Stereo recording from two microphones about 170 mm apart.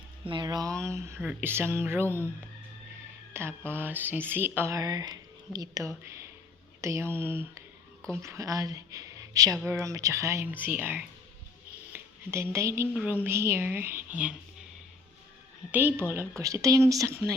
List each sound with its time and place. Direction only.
0.3 s speech: 25° right (ahead or behind)
2.0 s speech: 10° left (ahead or behind)
3.3 s speech: 15° right (ahead or behind)
15.7 s speech: 10° right (ahead or behind)